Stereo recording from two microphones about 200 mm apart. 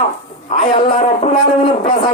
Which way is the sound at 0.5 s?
30° left (ahead or behind).